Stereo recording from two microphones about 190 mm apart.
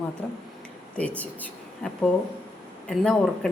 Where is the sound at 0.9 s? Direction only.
5° left (ahead or behind).